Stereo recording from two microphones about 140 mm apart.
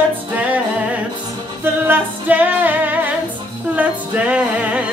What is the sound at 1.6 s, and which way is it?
Female singing, 10° right (ahead or behind).